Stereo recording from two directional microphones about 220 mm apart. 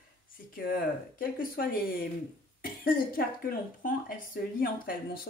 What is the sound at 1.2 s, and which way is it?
Speech, 40° left (ahead or behind).